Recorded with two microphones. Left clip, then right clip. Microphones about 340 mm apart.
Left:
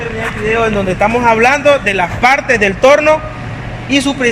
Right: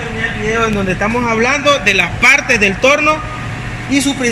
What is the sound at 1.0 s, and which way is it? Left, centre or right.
Speech, left.